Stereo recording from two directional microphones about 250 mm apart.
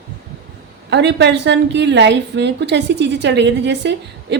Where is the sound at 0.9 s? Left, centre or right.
Right.